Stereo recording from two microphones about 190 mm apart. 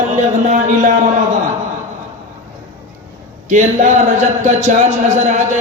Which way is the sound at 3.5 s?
40° right (ahead or behind).